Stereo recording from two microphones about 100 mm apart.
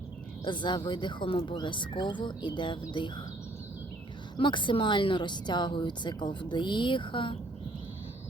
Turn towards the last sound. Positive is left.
turn(degrees=55)  # may be behind; listen again after turning